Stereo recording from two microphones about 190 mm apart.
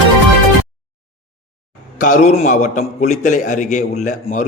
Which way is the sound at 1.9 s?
40° left (ahead or behind).